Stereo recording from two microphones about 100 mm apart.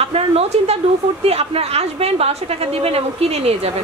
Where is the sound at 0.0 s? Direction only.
90° right.